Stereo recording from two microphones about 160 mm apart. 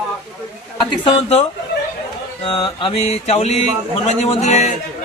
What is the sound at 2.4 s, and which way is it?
Mantra, 35° left (ahead or behind).